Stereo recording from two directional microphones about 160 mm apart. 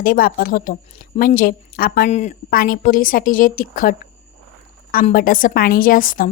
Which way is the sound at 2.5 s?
65° left (ahead or behind).